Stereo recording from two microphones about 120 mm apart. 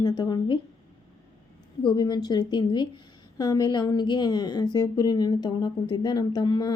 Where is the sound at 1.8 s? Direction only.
35° left (ahead or behind).